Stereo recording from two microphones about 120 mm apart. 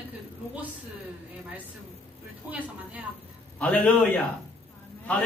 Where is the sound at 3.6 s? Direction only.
10° left (ahead or behind).